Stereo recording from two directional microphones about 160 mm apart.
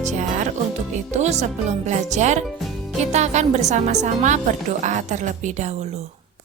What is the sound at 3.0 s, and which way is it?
A woman's voice, 45° right (ahead or behind).